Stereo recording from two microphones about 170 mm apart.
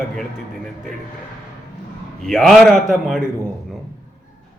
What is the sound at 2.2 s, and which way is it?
Speech, centre (ahead or behind).